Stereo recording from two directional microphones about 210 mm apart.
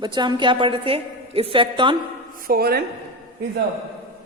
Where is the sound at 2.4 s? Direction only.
45° right (ahead or behind).